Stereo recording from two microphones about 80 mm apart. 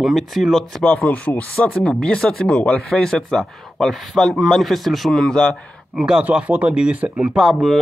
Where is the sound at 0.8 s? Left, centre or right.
Centre.